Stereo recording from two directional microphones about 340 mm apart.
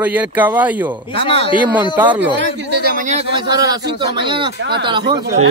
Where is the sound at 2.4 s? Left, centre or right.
Right; by 5.4 s centre.